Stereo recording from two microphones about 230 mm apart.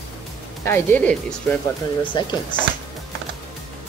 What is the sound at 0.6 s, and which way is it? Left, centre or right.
Speech, centre.